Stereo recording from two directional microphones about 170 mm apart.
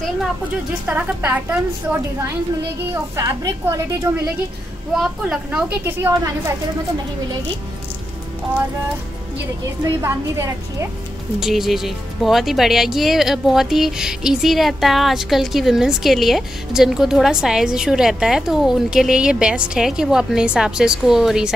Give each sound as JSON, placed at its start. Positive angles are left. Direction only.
{"t": 0.8, "sound": "a woman's voice", "side_deg": -10}
{"t": 4.9, "sound": "a woman's voice", "side_deg": 0}
{"t": 10.0, "sound": "a woman's voice", "side_deg": -15}
{"t": 11.3, "sound": "speech", "side_deg": 0}